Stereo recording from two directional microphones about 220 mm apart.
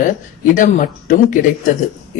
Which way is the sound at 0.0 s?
35° left (ahead or behind).